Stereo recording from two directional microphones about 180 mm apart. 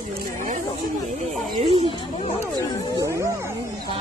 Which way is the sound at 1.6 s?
30° right (ahead or behind).